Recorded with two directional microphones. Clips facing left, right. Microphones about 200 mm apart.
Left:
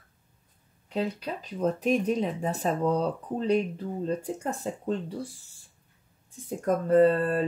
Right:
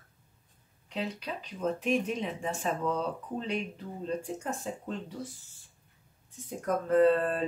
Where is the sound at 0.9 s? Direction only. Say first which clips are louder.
Left 5 dB; 40° left (ahead or behind).